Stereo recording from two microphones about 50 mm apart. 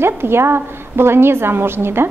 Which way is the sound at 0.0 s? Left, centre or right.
Right.